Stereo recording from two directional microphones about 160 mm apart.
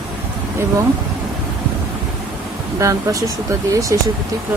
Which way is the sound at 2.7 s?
20° right (ahead or behind).